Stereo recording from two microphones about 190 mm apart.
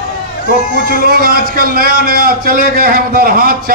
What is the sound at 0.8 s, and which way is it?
A man's voice, 50° right (ahead or behind).